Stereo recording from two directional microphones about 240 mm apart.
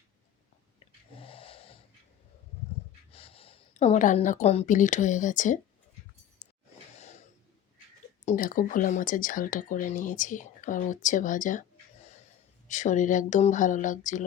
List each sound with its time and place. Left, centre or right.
1.1 s wheeze: left
3.1 s speech: left
6.4 s a sound: left
8.2 s speech: left
12.6 s speech: left